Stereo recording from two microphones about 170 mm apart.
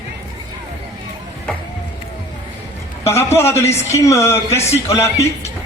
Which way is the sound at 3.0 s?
15° left (ahead or behind).